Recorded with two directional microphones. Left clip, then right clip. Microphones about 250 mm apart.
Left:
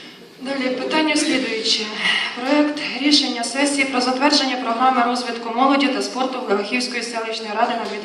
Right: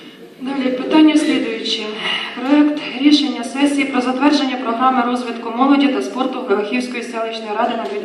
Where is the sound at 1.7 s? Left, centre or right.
Left.